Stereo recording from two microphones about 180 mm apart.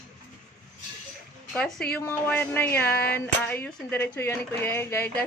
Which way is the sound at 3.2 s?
10° left (ahead or behind).